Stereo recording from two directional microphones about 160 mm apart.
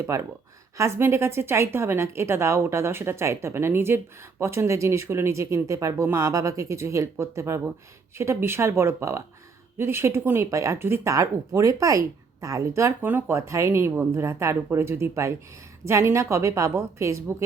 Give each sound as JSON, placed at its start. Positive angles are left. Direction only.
{"t": 0.1, "sound": "a woman's voice", "side_deg": -20}